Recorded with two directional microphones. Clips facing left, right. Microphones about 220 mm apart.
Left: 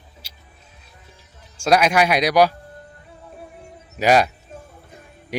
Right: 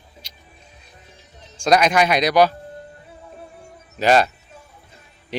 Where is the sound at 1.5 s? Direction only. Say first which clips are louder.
Even; 10° left (ahead or behind).